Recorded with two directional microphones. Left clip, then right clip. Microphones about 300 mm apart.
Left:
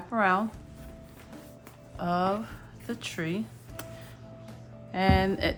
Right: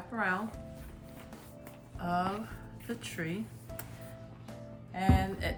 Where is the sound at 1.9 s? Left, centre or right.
Centre.